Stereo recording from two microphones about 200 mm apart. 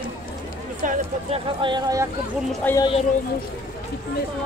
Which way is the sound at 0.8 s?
40° right (ahead or behind).